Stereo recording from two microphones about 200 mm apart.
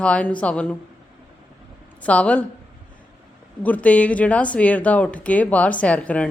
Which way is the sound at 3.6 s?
5° left (ahead or behind).